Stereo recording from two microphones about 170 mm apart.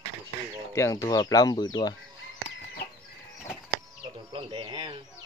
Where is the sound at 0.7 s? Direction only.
20° left (ahead or behind).